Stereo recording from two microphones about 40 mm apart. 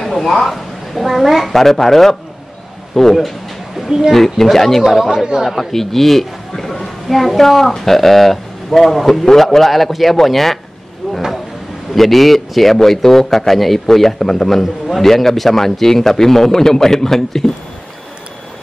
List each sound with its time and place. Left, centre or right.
0.0 s a woman's voice: centre
3.7 s speech: centre
4.1 s a man's voice: centre
5.1 s speech: right
5.4 s speech: centre
5.7 s a woman's voice: centre
11.0 s vehicle: centre
11.9 s a man's voice: centre